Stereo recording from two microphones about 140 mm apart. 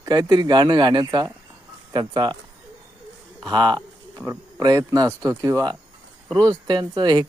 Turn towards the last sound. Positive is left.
turn(degrees=-30)  # may be behind; listen again after turning